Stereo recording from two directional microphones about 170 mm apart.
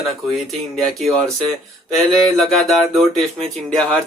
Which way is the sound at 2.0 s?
Centre (ahead or behind).